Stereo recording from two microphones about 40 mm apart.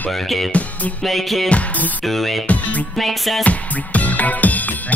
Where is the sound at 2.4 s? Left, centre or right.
Left.